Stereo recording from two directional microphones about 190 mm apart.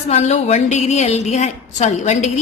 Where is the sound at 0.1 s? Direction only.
35° left (ahead or behind).